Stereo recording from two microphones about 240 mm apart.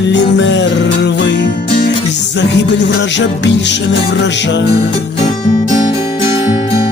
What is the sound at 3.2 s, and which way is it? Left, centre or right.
Music, left.